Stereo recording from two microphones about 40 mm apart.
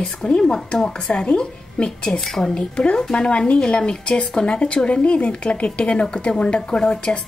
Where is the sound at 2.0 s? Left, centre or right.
Centre.